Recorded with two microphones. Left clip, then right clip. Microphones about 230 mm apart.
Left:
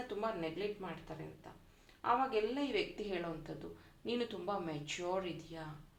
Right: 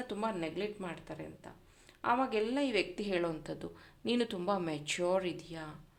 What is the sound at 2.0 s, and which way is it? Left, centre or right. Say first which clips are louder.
A woman's voice: right 2 dB; right.